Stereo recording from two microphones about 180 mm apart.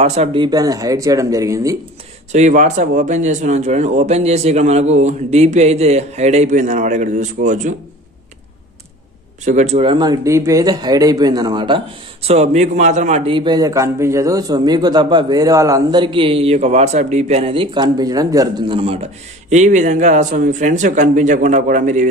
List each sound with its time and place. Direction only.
0.0 s speech: 35° right (ahead or behind); by 1.8 s 20° right (ahead or behind)
2.3 s speech: 40° right (ahead or behind)
9.4 s speech: 40° right (ahead or behind); by 18.8 s 20° right (ahead or behind)
19.5 s speech: 40° right (ahead or behind)